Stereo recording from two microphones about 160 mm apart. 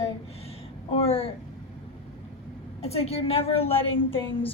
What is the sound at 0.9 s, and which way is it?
Speech, 35° left (ahead or behind).